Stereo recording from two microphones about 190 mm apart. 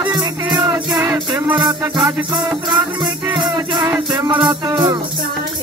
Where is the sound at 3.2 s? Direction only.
20° right (ahead or behind).